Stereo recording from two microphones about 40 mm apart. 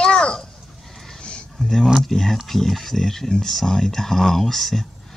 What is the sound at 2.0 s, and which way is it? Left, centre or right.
Speech, centre.